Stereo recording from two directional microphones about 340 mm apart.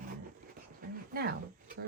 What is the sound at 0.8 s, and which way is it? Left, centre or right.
Speech, right.